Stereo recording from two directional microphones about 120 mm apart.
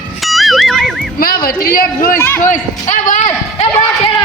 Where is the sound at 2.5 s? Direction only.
90° left; by 3.7 s 60° left (ahead or behind).